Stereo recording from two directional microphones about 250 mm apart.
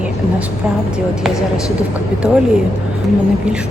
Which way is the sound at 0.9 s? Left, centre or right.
Centre.